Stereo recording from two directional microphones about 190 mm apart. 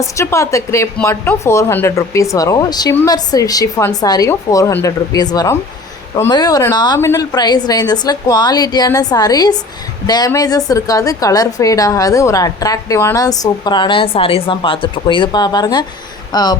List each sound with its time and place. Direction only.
0.2 s a woman's voice: 15° left (ahead or behind)